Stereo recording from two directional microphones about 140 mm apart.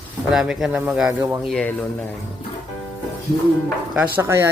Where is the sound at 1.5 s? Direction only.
5° left (ahead or behind).